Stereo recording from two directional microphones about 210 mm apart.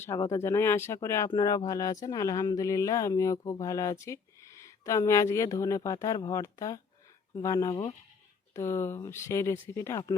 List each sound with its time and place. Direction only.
0.0 s speech: 10° left (ahead or behind)